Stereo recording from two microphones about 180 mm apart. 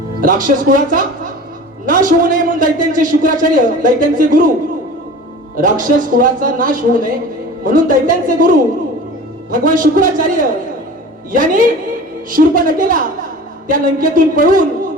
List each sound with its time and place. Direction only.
0.2 s a man's voice: 45° right (ahead or behind)
5.5 s a man's voice: 45° right (ahead or behind)